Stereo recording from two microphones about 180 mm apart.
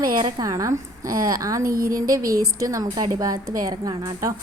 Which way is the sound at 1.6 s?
55° right (ahead or behind).